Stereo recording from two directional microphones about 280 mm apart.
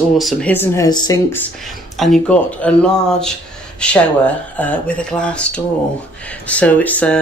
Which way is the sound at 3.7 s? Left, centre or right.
Centre.